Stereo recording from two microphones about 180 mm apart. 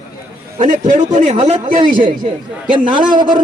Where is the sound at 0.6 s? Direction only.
45° right (ahead or behind).